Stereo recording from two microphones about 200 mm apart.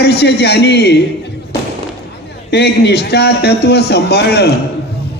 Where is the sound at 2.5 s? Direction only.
55° left (ahead or behind).